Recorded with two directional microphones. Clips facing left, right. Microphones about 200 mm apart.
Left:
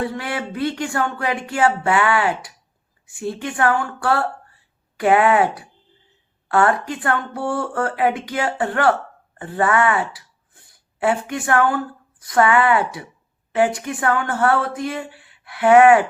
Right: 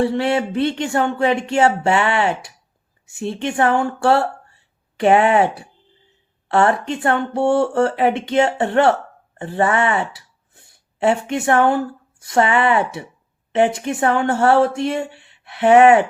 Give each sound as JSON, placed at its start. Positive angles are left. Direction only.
{"t": 0.0, "sound": "speech", "side_deg": -25}